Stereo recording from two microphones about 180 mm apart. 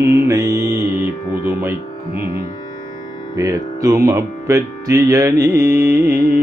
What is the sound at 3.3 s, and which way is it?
Speech, 20° right (ahead or behind).